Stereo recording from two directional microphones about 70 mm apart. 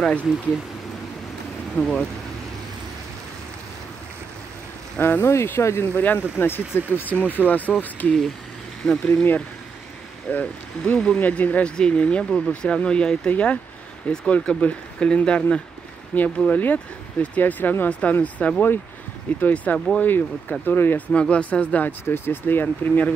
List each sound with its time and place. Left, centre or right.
0.0 s speech: centre
1.8 s speech: centre
4.9 s speech: left
5.2 s speech: left
5.9 s speech: left
9.0 s speech: left
21.1 s speech: centre
22.0 s speech: left